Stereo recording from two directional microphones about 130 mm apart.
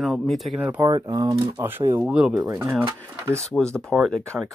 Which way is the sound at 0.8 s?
30° right (ahead or behind).